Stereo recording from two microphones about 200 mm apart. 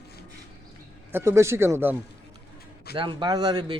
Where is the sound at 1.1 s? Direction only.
10° right (ahead or behind).